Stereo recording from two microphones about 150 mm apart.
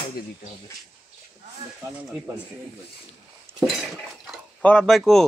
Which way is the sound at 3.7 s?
Centre (ahead or behind).